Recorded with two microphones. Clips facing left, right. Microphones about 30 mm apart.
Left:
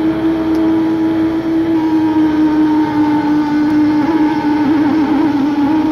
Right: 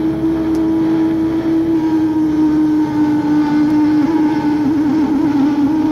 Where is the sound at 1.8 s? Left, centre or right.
Left.